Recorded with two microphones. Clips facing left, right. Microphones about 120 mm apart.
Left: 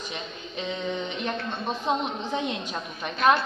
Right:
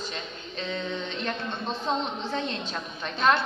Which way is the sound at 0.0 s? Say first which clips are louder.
Even; 15° left (ahead or behind).